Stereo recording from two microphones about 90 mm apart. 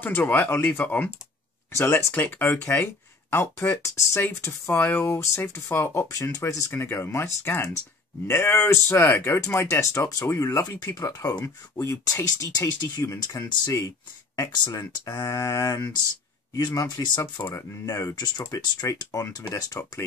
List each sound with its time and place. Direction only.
0.0 s speech: 20° left (ahead or behind)
1.7 s speech: 30° left (ahead or behind)
16.6 s speech: 50° left (ahead or behind)
17.4 s speech: 40° left (ahead or behind)